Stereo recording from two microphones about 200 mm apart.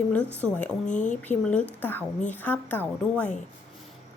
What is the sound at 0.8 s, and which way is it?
Speech, 40° left (ahead or behind).